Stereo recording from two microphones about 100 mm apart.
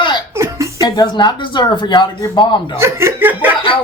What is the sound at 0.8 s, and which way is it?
Speech, 40° left (ahead or behind).